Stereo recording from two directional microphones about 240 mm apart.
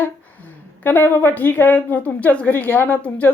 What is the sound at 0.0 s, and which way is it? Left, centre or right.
A woman's voice, centre.